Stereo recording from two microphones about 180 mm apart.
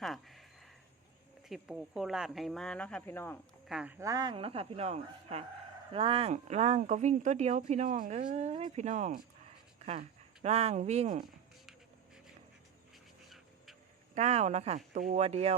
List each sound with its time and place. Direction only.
0.0 s a sound: centre (ahead or behind)
1.5 s speech: centre (ahead or behind)
3.7 s speech: 5° right (ahead or behind); by 11.2 s 35° right (ahead or behind)
14.2 s speech: 40° right (ahead or behind)